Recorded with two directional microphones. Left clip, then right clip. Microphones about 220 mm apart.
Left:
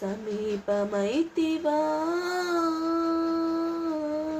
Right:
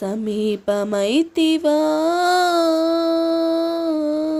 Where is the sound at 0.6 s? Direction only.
50° right (ahead or behind).